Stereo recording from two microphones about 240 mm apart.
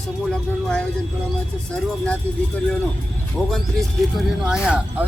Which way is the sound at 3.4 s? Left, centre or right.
Centre.